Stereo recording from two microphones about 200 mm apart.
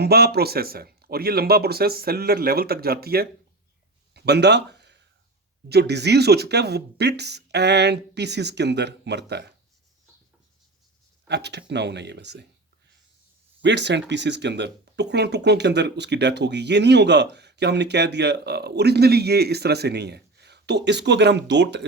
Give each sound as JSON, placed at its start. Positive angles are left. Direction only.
{"t": 0.0, "sound": "speech", "side_deg": -50}
{"t": 4.1, "sound": "a sound", "side_deg": -55}
{"t": 5.6, "sound": "speech", "side_deg": -55}
{"t": 11.3, "sound": "speech", "side_deg": -60}
{"t": 13.6, "sound": "speech", "side_deg": -60}